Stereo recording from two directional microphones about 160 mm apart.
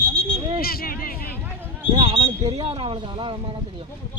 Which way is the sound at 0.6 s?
70° left (ahead or behind).